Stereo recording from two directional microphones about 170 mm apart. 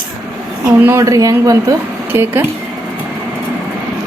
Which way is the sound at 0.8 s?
15° right (ahead or behind).